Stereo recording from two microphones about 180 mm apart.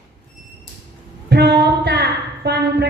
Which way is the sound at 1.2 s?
65° right (ahead or behind).